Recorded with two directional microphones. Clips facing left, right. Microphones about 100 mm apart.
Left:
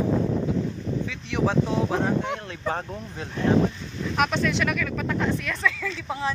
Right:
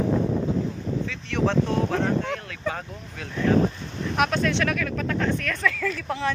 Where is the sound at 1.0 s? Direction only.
10° left (ahead or behind).